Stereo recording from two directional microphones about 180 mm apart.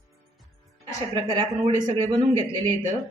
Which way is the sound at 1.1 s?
25° right (ahead or behind).